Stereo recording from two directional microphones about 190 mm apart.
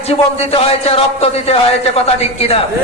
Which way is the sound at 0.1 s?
30° left (ahead or behind).